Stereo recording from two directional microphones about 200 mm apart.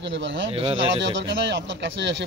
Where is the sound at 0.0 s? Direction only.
65° right (ahead or behind).